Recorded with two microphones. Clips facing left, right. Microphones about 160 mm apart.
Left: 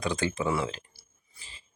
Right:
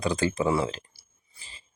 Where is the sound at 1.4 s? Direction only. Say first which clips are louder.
Right 1 dB; 30° right (ahead or behind).